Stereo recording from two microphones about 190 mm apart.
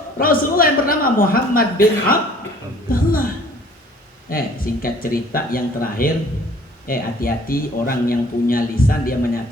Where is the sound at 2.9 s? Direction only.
50° left (ahead or behind).